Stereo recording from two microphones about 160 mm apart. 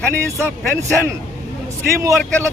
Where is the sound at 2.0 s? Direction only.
20° right (ahead or behind).